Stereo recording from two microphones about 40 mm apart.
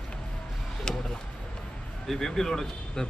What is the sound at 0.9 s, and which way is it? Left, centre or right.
Speech, left.